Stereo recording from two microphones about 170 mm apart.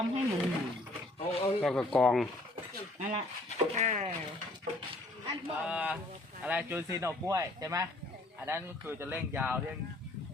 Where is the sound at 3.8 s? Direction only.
45° right (ahead or behind).